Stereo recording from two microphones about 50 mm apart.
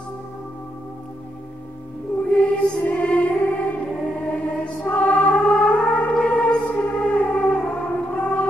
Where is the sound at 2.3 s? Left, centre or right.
Left.